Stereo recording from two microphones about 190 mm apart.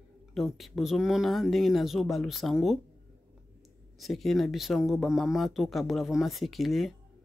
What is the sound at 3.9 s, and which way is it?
A man's voice, centre (ahead or behind).